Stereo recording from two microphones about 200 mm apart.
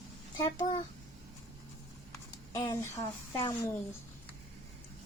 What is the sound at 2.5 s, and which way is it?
Speech, 20° left (ahead or behind).